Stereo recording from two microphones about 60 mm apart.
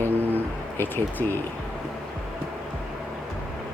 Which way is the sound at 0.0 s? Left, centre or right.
Right.